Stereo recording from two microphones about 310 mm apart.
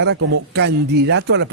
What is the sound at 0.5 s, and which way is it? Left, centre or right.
Speech, right.